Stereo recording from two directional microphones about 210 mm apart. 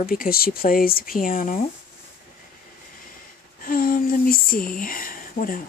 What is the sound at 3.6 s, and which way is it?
Speech, 40° left (ahead or behind).